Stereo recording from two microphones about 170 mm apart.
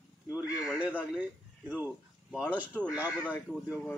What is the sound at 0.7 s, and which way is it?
Speech, 10° right (ahead or behind).